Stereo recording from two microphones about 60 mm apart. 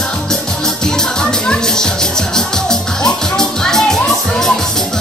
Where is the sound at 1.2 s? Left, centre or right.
Centre.